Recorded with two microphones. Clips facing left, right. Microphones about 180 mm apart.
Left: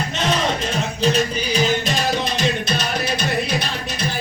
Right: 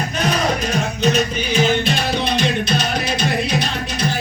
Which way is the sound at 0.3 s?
30° left (ahead or behind).